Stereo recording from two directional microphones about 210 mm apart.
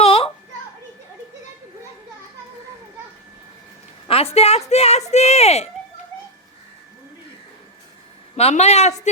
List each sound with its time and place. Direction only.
0.0 s children playing: 30° left (ahead or behind)
4.1 s speech: 30° left (ahead or behind)
8.4 s speech: 30° left (ahead or behind)